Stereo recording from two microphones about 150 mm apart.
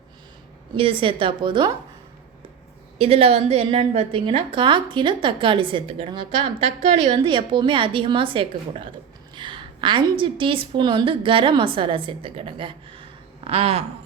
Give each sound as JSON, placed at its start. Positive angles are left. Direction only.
{"t": 0.8, "sound": "a woman's voice", "side_deg": -35}
{"t": 3.0, "sound": "a woman's voice", "side_deg": -40}